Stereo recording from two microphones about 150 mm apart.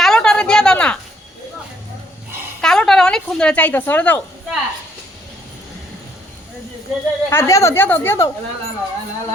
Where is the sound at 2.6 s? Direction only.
5° left (ahead or behind).